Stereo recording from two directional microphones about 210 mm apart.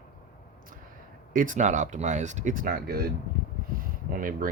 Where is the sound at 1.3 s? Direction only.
35° right (ahead or behind).